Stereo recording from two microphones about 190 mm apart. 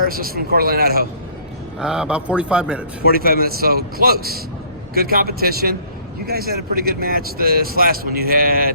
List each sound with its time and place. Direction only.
0.0 s speech: 50° right (ahead or behind)
1.8 s a man's voice: 5° right (ahead or behind)
3.1 s speech: 50° right (ahead or behind)